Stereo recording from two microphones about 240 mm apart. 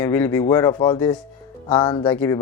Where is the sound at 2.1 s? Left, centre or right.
Centre.